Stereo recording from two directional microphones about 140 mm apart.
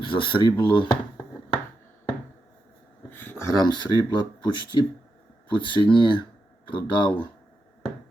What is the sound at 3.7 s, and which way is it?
Speech, 30° left (ahead or behind).